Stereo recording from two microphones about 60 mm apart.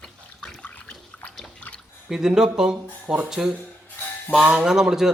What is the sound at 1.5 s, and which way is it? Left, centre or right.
Drip, centre.